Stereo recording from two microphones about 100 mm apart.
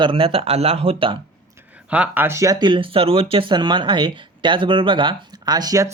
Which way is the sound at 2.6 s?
55° right (ahead or behind).